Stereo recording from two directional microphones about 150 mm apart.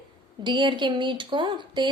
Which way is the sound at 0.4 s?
30° right (ahead or behind).